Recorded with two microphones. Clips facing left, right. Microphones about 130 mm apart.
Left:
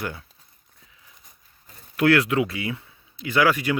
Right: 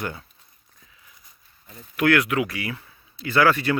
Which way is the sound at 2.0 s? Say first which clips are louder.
Left 1 dB; 30° left (ahead or behind).